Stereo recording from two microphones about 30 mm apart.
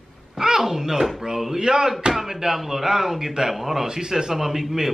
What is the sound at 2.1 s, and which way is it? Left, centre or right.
Speech, centre.